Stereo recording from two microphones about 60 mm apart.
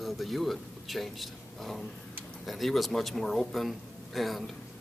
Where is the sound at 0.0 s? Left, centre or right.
Centre.